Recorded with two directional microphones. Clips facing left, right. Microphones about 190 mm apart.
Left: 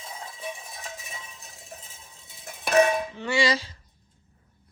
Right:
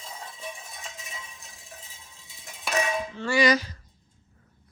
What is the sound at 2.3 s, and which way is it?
Music, 60° left (ahead or behind).